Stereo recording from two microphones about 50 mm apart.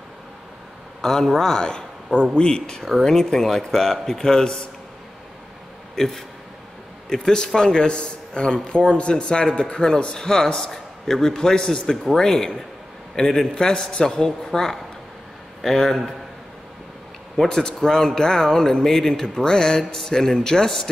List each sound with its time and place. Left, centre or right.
1.0 s a man's voice: centre
2.8 s a man's voice: centre
5.9 s a man's voice: centre
17.4 s a man's voice: centre